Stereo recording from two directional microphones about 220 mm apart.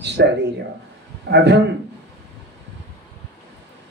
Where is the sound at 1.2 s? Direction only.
50° right (ahead or behind).